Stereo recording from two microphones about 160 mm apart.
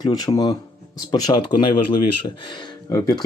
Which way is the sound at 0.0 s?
25° left (ahead or behind).